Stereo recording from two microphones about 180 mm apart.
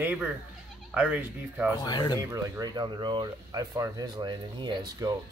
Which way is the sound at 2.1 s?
15° right (ahead or behind).